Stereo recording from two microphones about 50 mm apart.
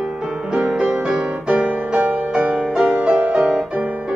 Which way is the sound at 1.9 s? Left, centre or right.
Right.